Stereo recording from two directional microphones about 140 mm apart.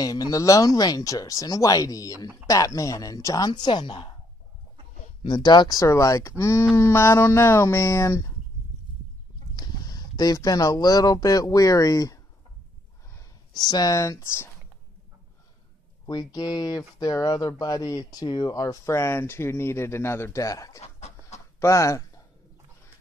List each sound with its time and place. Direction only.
0.0 s speech: 25° left (ahead or behind)
5.2 s speech: 30° left (ahead or behind)
9.6 s speech: 30° left (ahead or behind)
16.1 s speech: 30° left (ahead or behind)
20.8 s chicken: 50° left (ahead or behind)
21.5 s speech: 20° left (ahead or behind)